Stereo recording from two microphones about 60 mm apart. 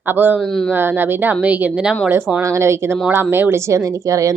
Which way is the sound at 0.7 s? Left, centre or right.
Right.